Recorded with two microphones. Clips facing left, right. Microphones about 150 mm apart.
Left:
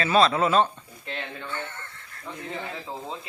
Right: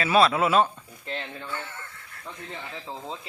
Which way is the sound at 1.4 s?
5° right (ahead or behind).